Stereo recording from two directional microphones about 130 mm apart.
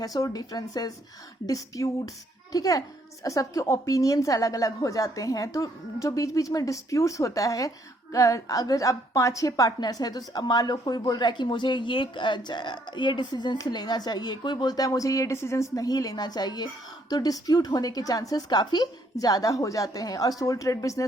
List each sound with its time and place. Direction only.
0.0 s a woman's voice: 30° left (ahead or behind)